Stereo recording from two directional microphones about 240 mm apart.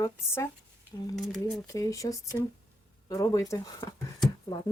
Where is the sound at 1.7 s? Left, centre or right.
Centre.